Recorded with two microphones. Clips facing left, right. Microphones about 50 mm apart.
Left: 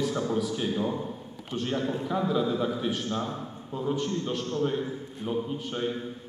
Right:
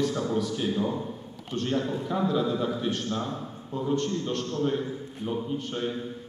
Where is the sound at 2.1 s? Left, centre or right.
Centre.